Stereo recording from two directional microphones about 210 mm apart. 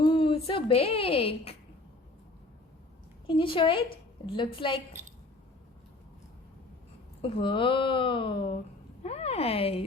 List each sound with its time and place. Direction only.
0.0 s a woman's voice: 25° left (ahead or behind)
3.2 s speech: 25° left (ahead or behind)
7.2 s speech: 25° left (ahead or behind)